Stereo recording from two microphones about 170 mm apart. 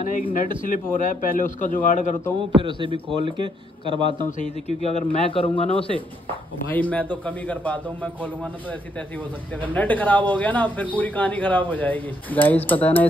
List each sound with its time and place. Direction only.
0.0 s a man's voice: 50° left (ahead or behind)
2.6 s speech: 30° right (ahead or behind)
4.4 s a man's voice: 40° left (ahead or behind)
6.7 s speech: 10° left (ahead or behind)